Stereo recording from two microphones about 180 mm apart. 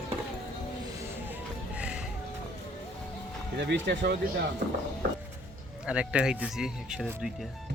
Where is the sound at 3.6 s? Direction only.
70° right (ahead or behind).